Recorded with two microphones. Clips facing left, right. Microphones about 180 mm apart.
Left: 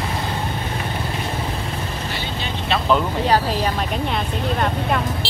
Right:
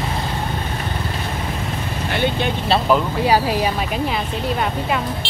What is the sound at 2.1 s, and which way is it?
Vehicle, 60° right (ahead or behind).